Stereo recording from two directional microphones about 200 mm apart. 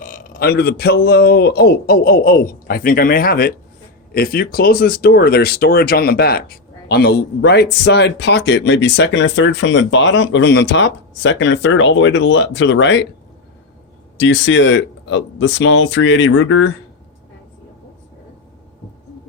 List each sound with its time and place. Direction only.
0.0 s speech: 40° left (ahead or behind); by 13.1 s 65° left (ahead or behind)
14.2 s speech: 65° left (ahead or behind)